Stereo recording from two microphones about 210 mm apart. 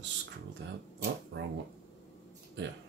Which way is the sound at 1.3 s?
60° right (ahead or behind).